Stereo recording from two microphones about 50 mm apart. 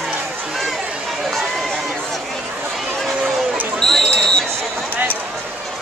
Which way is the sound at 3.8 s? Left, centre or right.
Centre.